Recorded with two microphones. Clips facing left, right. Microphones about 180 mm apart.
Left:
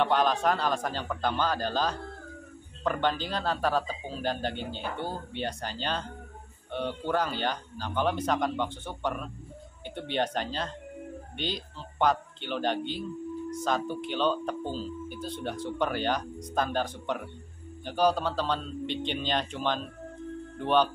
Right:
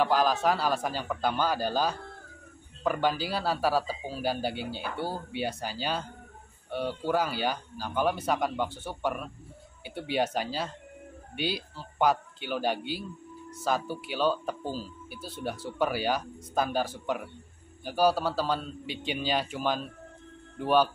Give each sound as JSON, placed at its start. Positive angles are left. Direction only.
{"t": 0.0, "sound": "speech", "side_deg": -5}